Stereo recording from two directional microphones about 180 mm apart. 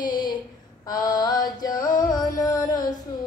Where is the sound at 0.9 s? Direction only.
20° left (ahead or behind).